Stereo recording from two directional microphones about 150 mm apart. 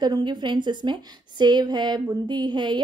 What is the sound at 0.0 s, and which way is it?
A woman's voice, 30° right (ahead or behind).